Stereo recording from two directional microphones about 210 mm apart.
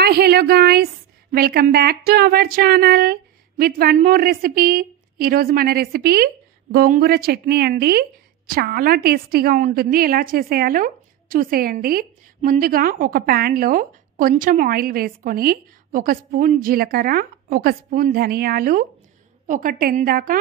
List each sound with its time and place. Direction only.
0.0 s a woman's voice: 50° right (ahead or behind)